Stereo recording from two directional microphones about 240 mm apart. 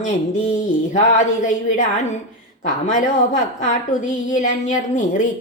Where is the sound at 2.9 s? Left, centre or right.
Left.